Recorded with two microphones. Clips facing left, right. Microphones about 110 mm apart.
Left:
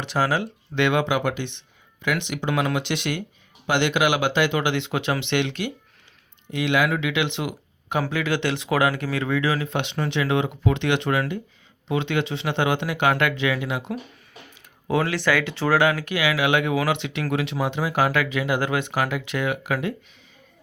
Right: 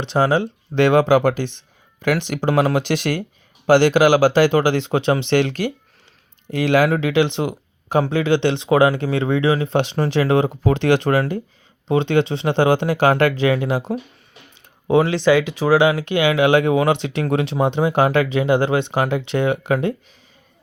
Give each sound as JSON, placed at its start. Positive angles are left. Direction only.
{"t": 0.0, "sound": "speech", "side_deg": -25}
{"t": 14.8, "sound": "speech", "side_deg": -25}